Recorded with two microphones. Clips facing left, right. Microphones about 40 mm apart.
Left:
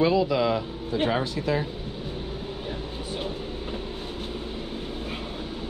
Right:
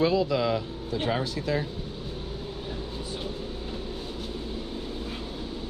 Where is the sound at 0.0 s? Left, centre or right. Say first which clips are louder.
Left 2 dB; centre.